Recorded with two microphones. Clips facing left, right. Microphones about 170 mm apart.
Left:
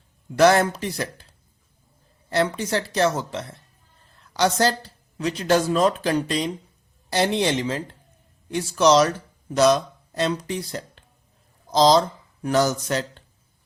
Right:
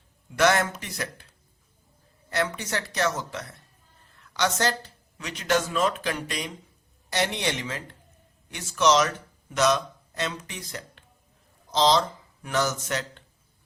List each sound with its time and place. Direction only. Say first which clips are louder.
0.3 s speech: left 6 dB; 35° left (ahead or behind)
2.3 s a woman's voice: left 6 dB; 30° left (ahead or behind)